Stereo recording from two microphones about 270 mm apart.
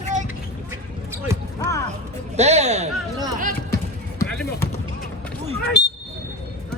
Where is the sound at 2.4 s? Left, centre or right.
Right.